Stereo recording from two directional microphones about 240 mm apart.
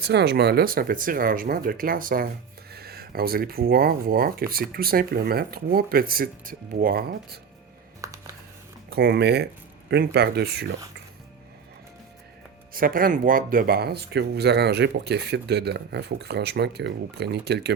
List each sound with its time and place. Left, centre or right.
0.0 s speech: right
8.0 s a sound: centre
8.9 s speech: right
12.7 s speech: right